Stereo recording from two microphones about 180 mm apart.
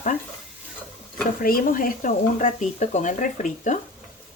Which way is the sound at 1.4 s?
50° left (ahead or behind).